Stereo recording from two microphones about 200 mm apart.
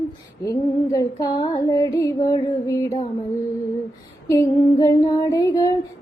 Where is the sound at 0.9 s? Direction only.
15° left (ahead or behind).